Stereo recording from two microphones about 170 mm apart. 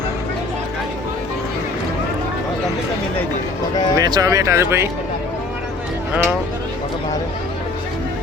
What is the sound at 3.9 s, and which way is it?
Speech, 20° right (ahead or behind).